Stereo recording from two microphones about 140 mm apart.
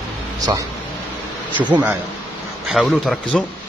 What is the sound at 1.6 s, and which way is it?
Speech, 10° right (ahead or behind).